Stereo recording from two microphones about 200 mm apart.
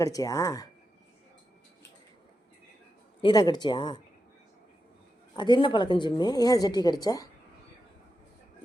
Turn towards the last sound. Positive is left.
turn(degrees=20)  # may be behind; listen again after turning